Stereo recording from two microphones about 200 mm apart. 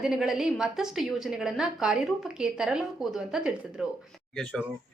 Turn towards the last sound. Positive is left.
turn(degrees=0)  # may be behind; listen again after turning